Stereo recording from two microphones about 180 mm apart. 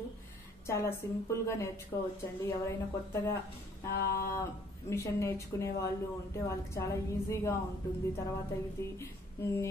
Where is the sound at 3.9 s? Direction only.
65° left (ahead or behind).